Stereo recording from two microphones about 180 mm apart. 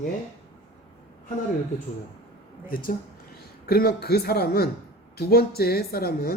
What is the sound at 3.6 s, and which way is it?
Speech, 60° left (ahead or behind).